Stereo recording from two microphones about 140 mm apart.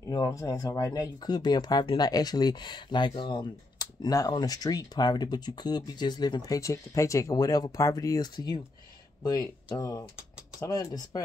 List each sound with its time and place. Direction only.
0.0 s speech: 25° left (ahead or behind)